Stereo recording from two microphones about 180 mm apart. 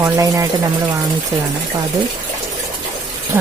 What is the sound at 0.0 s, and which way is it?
Speech, 15° right (ahead or behind).